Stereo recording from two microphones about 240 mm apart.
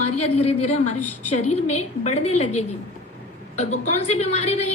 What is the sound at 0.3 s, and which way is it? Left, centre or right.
A woman's voice, left.